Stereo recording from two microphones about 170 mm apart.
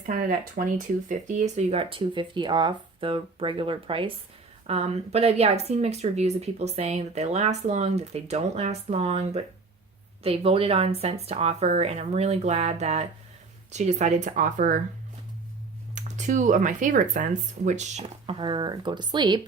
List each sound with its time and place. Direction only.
0.0 s speech: 55° right (ahead or behind)
16.0 s speech: 45° right (ahead or behind); by 19.4 s 25° right (ahead or behind)